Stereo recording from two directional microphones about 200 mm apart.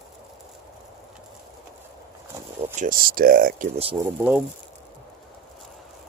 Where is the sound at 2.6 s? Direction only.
35° right (ahead or behind).